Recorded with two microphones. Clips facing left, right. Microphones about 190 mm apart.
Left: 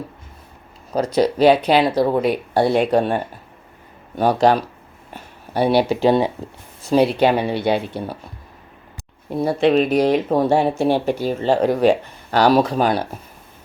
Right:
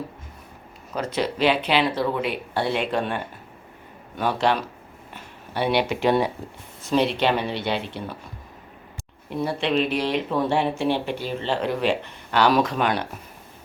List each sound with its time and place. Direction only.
0.9 s speech: 40° left (ahead or behind)
4.2 s speech: 40° left (ahead or behind)
6.8 s speech: 40° left (ahead or behind)
7.3 s speech: 15° left (ahead or behind)
7.6 s speech: 40° left (ahead or behind)
9.3 s speech: 40° left (ahead or behind)